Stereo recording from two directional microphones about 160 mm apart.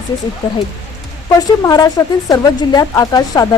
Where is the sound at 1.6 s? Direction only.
20° left (ahead or behind).